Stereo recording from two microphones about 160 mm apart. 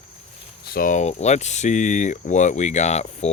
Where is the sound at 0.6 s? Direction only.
65° left (ahead or behind).